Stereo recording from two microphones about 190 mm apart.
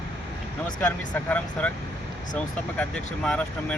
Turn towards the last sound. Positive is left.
turn(degrees=5)  # may be behind; listen again after turning